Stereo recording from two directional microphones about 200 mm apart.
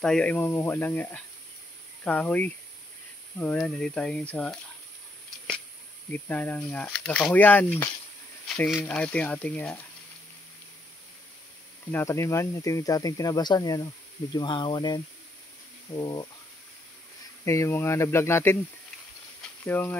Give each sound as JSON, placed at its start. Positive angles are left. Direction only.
{"t": 0.0, "sound": "speech", "side_deg": 5}
{"t": 6.1, "sound": "speech", "side_deg": 10}
{"t": 11.9, "sound": "speech", "side_deg": 15}
{"t": 17.5, "sound": "speech", "side_deg": 15}
{"t": 19.6, "sound": "speech", "side_deg": 10}